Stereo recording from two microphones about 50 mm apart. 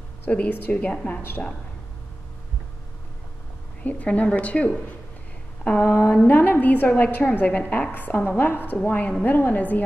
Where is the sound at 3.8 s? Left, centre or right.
Left.